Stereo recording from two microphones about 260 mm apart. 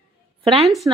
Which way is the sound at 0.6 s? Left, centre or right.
Centre.